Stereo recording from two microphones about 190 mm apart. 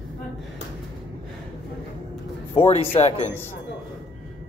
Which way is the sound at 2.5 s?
30° left (ahead or behind).